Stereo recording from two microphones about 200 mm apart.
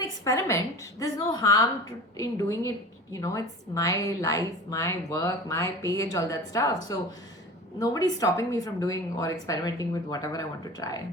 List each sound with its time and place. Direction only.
0.0 s a woman's voice: 15° left (ahead or behind)